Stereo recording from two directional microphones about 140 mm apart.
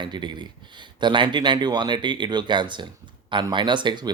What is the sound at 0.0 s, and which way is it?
Speech, 35° right (ahead or behind).